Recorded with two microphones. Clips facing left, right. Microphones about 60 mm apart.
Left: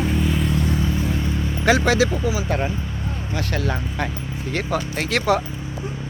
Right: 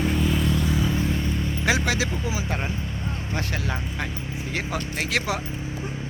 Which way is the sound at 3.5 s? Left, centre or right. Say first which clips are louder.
Left 5 dB; centre.